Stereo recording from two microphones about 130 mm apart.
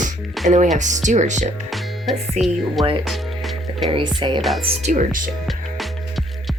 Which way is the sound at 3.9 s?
40° right (ahead or behind).